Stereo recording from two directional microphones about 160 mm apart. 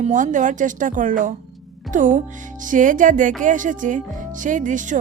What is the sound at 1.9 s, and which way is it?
Music, 55° right (ahead or behind).